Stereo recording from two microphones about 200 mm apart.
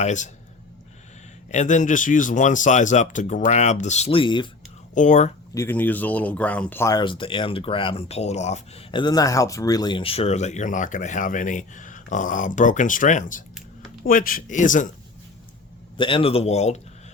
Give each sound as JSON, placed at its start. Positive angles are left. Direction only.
{"t": 0.0, "sound": "speech", "side_deg": 35}
{"t": 1.5, "sound": "speech", "side_deg": 35}
{"t": 4.9, "sound": "speech", "side_deg": 40}
{"t": 5.5, "sound": "speech", "side_deg": 10}
{"t": 16.0, "sound": "speech", "side_deg": 25}